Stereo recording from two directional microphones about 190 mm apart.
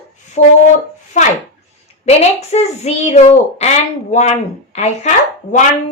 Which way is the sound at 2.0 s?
35° left (ahead or behind).